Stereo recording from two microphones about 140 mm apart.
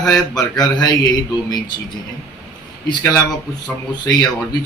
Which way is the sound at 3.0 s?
25° left (ahead or behind).